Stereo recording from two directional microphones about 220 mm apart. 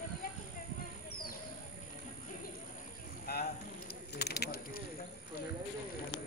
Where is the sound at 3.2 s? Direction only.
45° left (ahead or behind).